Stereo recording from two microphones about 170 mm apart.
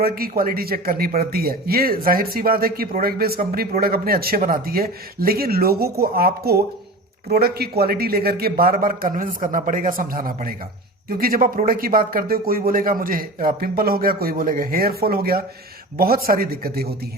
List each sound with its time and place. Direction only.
0.0 s speech: 60° right (ahead or behind)